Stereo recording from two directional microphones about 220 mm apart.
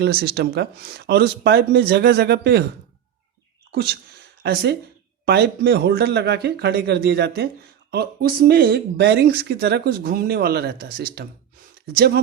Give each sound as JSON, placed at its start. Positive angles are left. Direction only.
{"t": 0.0, "sound": "speech", "side_deg": -45}
{"t": 3.7, "sound": "speech", "side_deg": -45}